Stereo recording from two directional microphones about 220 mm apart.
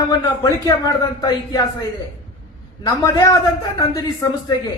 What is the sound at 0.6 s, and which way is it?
Speech, 15° left (ahead or behind).